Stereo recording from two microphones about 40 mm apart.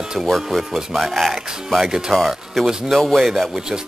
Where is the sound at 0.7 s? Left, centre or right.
Centre.